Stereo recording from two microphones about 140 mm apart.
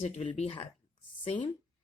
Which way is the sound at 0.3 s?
45° left (ahead or behind).